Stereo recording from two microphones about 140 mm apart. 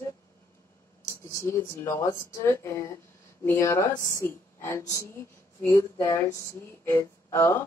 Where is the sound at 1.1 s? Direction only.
20° left (ahead or behind).